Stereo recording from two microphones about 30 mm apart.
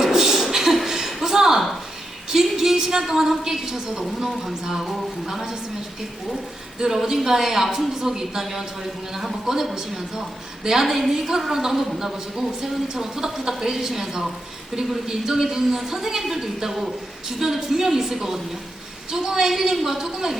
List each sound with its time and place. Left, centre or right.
0.0 s a sound: centre
3.1 s a woman's voice: centre
6.9 s a woman's voice: centre